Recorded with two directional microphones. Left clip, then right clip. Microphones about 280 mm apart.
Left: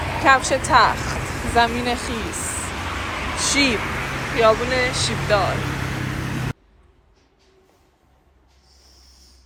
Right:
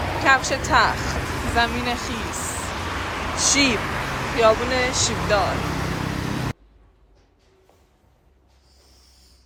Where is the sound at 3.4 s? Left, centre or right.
Centre.